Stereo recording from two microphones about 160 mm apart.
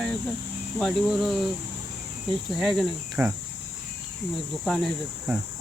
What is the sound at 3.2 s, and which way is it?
Cricket, 15° right (ahead or behind).